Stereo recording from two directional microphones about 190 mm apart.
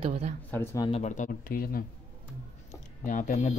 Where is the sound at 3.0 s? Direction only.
40° left (ahead or behind).